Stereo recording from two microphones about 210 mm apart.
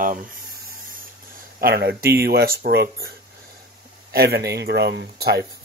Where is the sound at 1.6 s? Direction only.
50° right (ahead or behind).